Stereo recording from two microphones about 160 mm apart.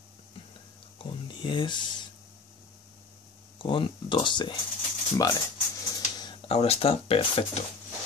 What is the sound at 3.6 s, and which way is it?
Speech, 30° left (ahead or behind).